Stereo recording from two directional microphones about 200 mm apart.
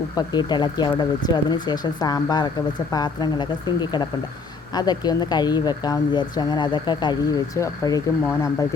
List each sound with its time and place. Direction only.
0.2 s speech: 20° left (ahead or behind)